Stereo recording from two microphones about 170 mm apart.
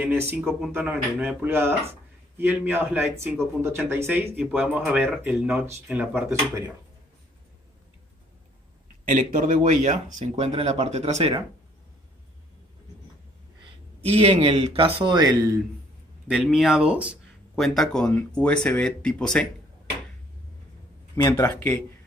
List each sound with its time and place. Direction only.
0.0 s speech: 10° right (ahead or behind)
9.0 s speech: 50° right (ahead or behind)
14.0 s speech: 35° right (ahead or behind)
16.3 s speech: 5° right (ahead or behind)
21.1 s speech: 15° left (ahead or behind)